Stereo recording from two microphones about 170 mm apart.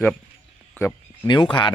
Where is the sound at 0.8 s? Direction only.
15° left (ahead or behind).